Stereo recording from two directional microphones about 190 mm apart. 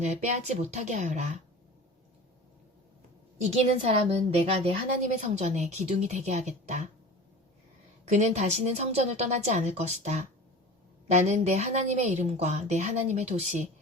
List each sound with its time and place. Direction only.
0.0 s a woman's voice: 35° right (ahead or behind)
3.4 s a woman's voice: 35° right (ahead or behind)
8.1 s a woman's voice: 35° right (ahead or behind)